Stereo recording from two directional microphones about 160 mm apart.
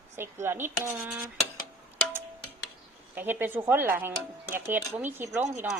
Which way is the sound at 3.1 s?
10° right (ahead or behind).